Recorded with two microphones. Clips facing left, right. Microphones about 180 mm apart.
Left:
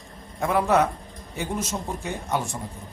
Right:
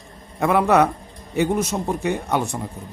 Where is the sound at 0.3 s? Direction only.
65° right (ahead or behind).